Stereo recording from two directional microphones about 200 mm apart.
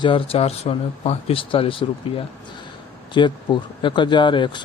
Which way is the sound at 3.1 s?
25° left (ahead or behind).